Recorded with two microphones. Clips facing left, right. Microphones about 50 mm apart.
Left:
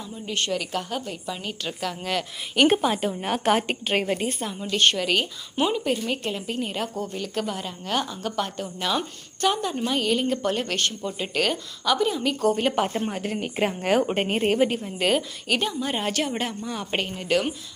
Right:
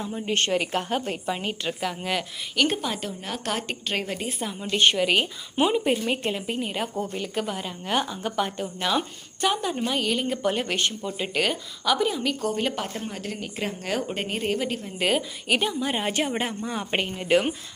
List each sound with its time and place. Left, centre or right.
0.0 s a woman's voice: right
1.8 s a woman's voice: centre
2.8 s a woman's voice: centre
3.2 s a woman's voice: left
3.5 s a woman's voice: centre
4.3 s speech: centre
4.7 s a woman's voice: centre
6.9 s a woman's voice: right; by 12.7 s centre
12.7 s a woman's voice: centre
13.6 s a woman's voice: left
14.7 s a woman's voice: centre
14.9 s a woman's voice: centre
17.2 s a woman's voice: right